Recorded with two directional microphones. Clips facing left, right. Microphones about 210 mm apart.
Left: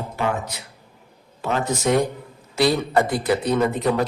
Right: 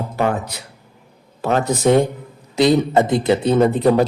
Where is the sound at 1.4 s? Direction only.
35° right (ahead or behind).